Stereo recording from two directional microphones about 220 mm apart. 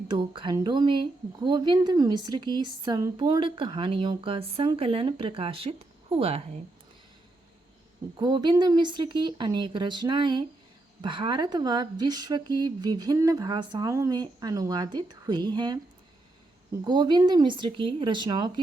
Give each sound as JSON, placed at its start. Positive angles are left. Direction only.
{"t": 0.1, "sound": "a woman's voice", "side_deg": -20}
{"t": 8.1, "sound": "a woman's voice", "side_deg": -20}
{"t": 16.8, "sound": "a woman's voice", "side_deg": -20}